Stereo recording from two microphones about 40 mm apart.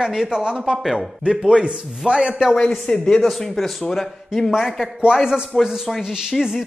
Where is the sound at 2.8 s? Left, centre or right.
Left.